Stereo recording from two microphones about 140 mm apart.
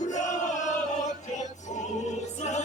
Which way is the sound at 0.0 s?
60° left (ahead or behind).